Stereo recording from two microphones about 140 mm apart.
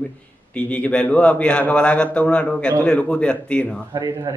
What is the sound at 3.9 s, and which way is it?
Speech, 25° right (ahead or behind).